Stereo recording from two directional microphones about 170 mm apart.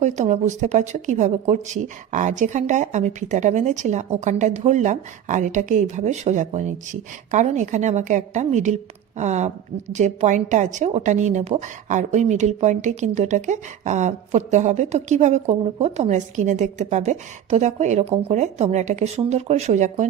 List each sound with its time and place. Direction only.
0.0 s a woman's voice: 45° right (ahead or behind)